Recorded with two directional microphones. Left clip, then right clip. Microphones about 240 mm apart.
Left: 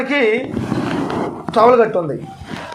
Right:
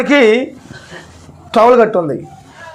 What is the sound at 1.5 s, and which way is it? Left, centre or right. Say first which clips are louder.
Speech: right 3 dB; right.